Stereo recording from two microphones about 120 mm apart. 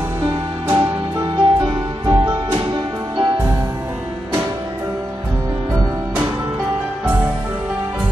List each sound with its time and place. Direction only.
0.2 s music: 35° right (ahead or behind)